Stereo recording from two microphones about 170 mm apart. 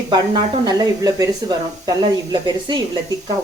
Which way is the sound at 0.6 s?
20° right (ahead or behind).